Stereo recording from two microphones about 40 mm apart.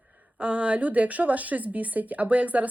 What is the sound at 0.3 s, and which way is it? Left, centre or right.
A woman's voice, right.